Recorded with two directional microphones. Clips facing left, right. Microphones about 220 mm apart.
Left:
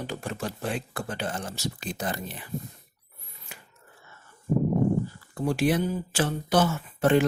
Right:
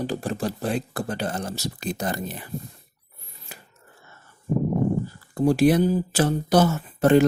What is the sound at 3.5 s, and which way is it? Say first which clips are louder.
Chopping: right 3 dB; 35° right (ahead or behind).